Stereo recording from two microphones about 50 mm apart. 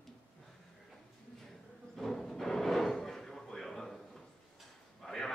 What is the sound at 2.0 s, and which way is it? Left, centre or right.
Drawer open or close, centre.